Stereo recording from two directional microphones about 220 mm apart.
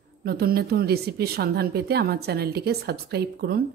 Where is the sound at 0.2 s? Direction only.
45° right (ahead or behind).